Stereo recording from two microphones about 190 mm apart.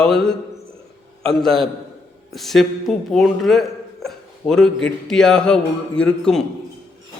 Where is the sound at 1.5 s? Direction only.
Centre (ahead or behind).